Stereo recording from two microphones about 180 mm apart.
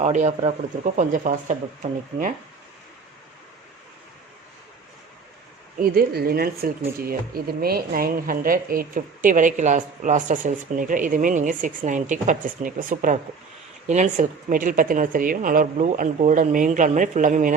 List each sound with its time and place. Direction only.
0.0 s speech: 40° right (ahead or behind)
5.8 s speech: 55° right (ahead or behind)